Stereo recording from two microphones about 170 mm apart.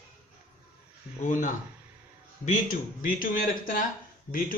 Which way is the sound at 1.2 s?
50° left (ahead or behind).